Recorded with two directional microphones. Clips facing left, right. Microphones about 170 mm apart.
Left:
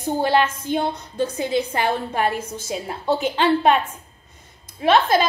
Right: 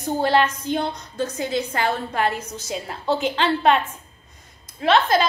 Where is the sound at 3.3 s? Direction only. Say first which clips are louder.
Left 2 dB; 10° left (ahead or behind).